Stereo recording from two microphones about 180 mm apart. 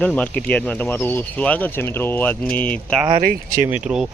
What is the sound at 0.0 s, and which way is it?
Speech, 10° left (ahead or behind).